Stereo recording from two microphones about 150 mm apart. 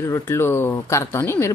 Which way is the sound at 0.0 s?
15° left (ahead or behind).